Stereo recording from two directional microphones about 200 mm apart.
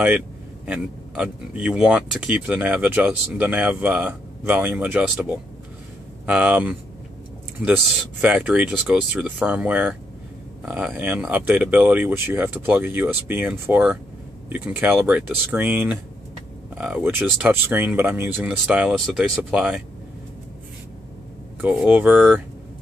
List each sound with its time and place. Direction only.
0.7 s speech: 5° right (ahead or behind)
21.5 s speech: 10° right (ahead or behind)